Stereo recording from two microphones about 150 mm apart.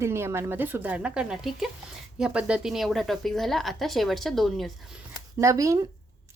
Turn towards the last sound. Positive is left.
turn(degrees=-20)  # may be behind; listen again after turning